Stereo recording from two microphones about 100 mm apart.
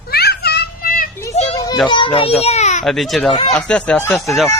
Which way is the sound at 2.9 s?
Centre (ahead or behind).